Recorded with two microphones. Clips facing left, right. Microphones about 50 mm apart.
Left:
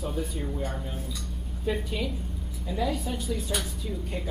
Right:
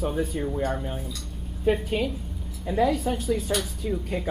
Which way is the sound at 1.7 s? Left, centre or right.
Right.